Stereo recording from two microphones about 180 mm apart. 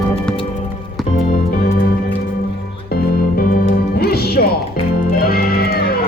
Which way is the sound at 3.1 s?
60° left (ahead or behind).